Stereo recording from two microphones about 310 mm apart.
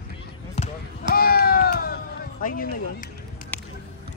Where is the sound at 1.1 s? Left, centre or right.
Left.